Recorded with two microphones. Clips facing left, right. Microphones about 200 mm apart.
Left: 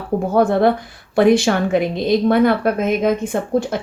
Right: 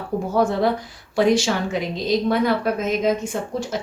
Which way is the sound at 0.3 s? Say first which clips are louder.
Left 5 dB; 55° left (ahead or behind).